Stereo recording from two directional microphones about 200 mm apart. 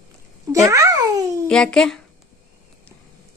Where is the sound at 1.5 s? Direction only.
5° left (ahead or behind).